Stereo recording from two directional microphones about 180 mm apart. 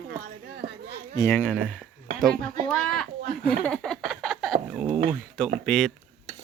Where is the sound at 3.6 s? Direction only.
5° left (ahead or behind).